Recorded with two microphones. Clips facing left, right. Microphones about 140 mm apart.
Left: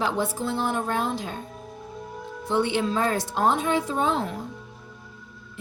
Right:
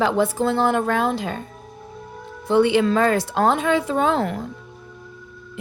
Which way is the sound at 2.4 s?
90° right.